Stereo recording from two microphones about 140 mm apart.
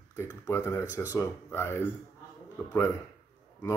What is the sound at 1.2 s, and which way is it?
Speech, 20° left (ahead or behind).